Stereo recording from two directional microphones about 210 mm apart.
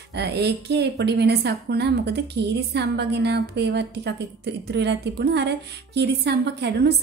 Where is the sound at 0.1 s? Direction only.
50° right (ahead or behind).